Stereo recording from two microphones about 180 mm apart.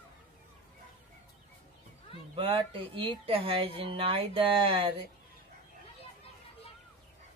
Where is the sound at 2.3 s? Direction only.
30° right (ahead or behind).